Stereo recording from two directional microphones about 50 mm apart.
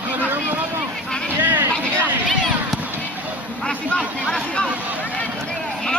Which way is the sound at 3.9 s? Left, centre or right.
Centre.